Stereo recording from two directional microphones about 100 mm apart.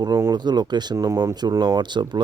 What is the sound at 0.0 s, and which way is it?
Speech, 40° right (ahead or behind).